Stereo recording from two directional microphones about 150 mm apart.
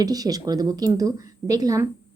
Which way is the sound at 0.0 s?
25° right (ahead or behind).